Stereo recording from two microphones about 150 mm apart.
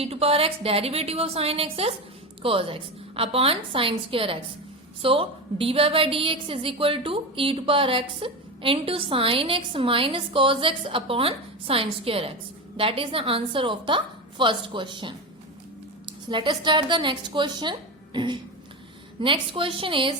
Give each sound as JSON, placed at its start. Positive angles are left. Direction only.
{"t": 0.0, "sound": "a woman's voice", "side_deg": -40}